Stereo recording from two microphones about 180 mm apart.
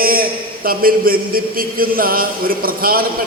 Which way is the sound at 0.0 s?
55° right (ahead or behind).